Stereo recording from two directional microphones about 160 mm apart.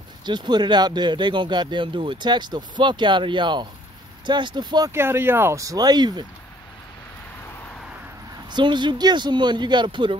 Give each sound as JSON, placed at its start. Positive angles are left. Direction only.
{"t": 0.2, "sound": "speech", "side_deg": -25}
{"t": 8.5, "sound": "speech", "side_deg": -30}